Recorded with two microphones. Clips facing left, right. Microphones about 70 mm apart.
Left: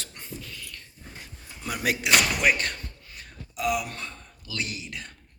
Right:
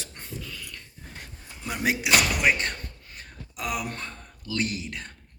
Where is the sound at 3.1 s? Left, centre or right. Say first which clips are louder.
Left 4 dB; right.